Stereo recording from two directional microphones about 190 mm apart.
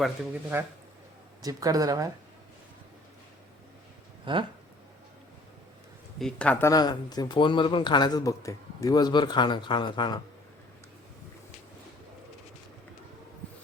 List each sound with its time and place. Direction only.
0.5 s a man's voice: 10° right (ahead or behind)
4.3 s a man's voice: 25° right (ahead or behind)
6.1 s speech: 5° left (ahead or behind); by 10.2 s 25° left (ahead or behind)